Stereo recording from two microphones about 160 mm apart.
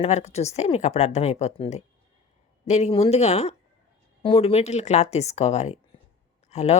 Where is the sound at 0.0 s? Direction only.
40° left (ahead or behind).